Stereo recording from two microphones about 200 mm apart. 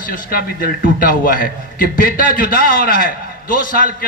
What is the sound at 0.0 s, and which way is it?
A man's voice, 45° left (ahead or behind).